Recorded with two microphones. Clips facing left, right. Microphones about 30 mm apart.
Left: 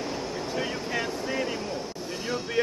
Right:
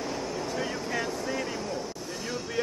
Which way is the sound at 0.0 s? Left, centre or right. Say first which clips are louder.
Even; centre.